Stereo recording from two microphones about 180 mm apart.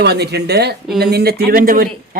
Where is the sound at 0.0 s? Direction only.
65° right (ahead or behind).